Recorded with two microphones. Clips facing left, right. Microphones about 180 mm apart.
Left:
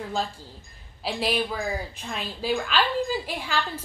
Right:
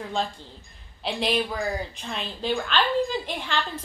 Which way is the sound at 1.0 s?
5° left (ahead or behind).